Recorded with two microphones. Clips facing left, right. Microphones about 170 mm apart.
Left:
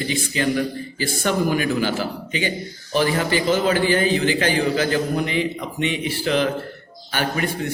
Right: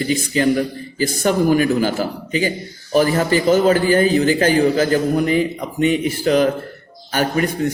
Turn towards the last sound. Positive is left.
turn(degrees=-40)  # may be behind; listen again after turning